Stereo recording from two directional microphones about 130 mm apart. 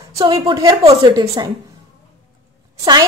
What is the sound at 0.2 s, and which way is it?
A woman's voice, 30° right (ahead or behind).